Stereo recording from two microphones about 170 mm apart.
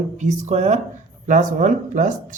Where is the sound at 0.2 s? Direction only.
40° right (ahead or behind).